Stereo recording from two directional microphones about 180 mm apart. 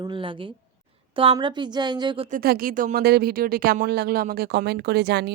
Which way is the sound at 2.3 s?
55° right (ahead or behind).